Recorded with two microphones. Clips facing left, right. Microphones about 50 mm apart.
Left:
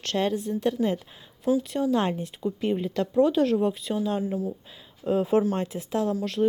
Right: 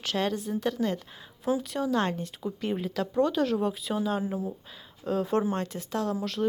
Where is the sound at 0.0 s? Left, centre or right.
Centre.